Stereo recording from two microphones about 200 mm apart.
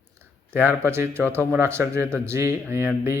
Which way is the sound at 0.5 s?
10° right (ahead or behind).